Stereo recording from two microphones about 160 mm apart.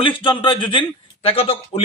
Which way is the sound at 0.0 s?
30° left (ahead or behind).